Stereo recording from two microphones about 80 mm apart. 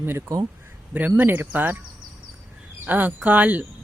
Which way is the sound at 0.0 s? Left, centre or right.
Right.